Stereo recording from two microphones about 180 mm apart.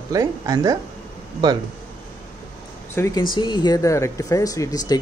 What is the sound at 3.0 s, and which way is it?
Speech, 15° left (ahead or behind).